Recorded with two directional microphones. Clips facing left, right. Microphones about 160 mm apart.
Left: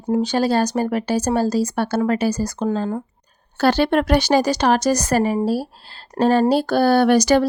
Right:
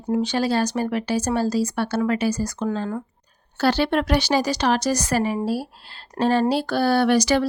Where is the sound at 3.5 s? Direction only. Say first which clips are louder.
Left 3 dB; 50° left (ahead or behind).